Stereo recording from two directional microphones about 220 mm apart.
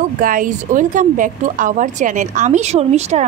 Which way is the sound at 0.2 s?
40° right (ahead or behind).